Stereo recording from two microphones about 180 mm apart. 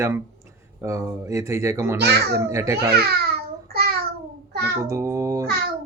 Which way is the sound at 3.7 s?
55° right (ahead or behind).